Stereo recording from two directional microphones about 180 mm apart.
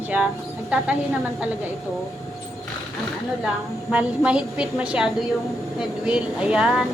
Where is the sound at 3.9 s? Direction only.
5° right (ahead or behind).